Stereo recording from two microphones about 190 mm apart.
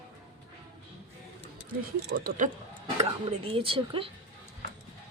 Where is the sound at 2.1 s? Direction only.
50° right (ahead or behind).